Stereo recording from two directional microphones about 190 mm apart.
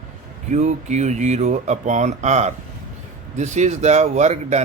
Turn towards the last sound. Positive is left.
turn(degrees=-35)  # may be behind; listen again after turning